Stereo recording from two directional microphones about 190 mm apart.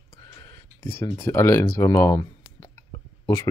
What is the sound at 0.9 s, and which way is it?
Speech, 15° left (ahead or behind).